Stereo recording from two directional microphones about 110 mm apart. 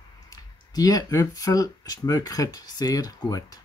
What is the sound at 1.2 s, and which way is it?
Speech, 30° left (ahead or behind).